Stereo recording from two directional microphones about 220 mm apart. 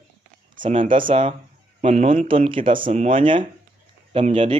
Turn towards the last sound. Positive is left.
turn(degrees=-25)  # may be behind; listen again after turning